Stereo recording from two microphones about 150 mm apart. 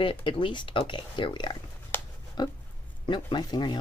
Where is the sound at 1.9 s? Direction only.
15° left (ahead or behind).